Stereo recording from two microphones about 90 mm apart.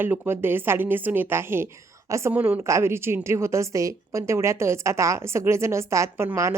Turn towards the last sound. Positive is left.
turn(degrees=-30)  # may be behind; listen again after turning